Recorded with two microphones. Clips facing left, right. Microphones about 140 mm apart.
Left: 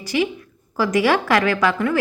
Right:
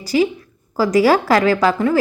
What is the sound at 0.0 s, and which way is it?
A woman's voice, 35° right (ahead or behind).